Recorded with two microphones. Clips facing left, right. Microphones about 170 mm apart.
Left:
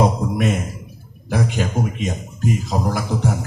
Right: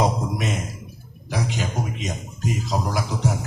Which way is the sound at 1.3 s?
55° left (ahead or behind).